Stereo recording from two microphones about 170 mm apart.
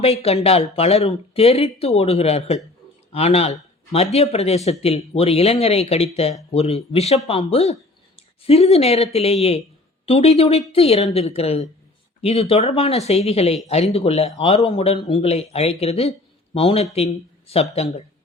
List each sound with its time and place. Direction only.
0.0 s speech: 35° left (ahead or behind)